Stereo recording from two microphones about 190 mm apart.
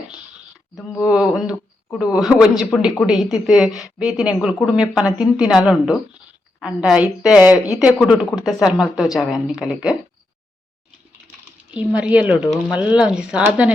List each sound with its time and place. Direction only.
1.1 s speech: 5° right (ahead or behind)
11.7 s speech: 5° right (ahead or behind)